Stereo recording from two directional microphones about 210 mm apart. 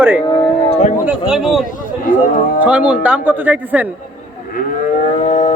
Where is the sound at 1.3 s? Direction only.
Centre (ahead or behind).